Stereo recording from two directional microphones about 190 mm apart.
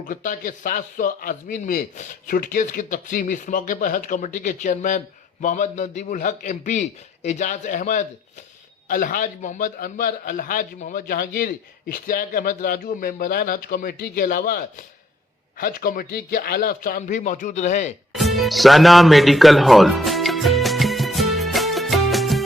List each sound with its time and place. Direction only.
0.0 s speech: 45° left (ahead or behind)
18.1 s music: centre (ahead or behind)